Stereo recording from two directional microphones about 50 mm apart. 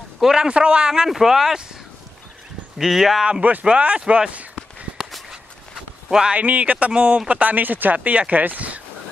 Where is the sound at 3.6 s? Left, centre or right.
Right.